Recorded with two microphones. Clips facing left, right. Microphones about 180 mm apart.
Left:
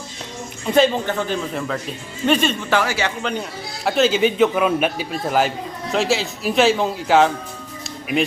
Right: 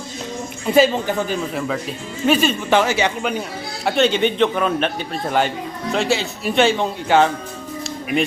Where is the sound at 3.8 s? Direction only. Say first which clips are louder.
Even; centre (ahead or behind).